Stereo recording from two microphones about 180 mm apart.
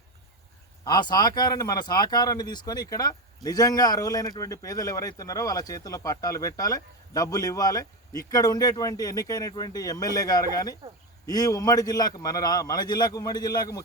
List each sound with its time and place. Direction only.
0.9 s speech: 25° left (ahead or behind)